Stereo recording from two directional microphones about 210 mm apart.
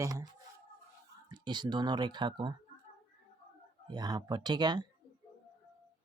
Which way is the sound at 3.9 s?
20° right (ahead or behind).